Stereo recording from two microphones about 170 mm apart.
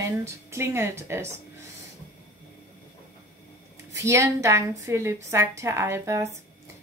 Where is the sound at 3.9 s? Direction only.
20° right (ahead or behind).